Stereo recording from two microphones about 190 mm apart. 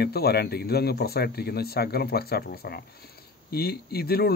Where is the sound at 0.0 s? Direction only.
55° left (ahead or behind).